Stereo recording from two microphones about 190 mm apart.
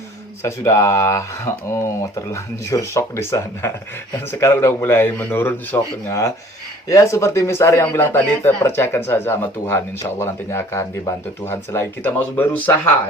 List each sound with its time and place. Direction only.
0.4 s a man's voice: 15° left (ahead or behind)